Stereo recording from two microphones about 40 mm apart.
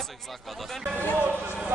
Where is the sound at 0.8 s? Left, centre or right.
Right.